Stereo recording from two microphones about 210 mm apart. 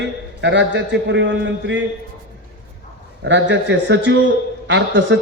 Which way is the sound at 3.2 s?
60° right (ahead or behind).